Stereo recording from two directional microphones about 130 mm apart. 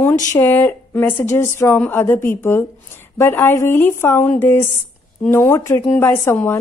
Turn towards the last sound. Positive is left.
turn(degrees=20)  # may be behind; listen again after turning